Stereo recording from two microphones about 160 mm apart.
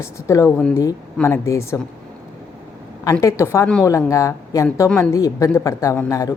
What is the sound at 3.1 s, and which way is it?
A woman's voice, 20° left (ahead or behind).